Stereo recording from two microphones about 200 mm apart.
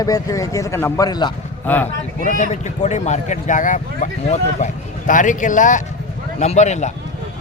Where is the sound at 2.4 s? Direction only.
35° left (ahead or behind).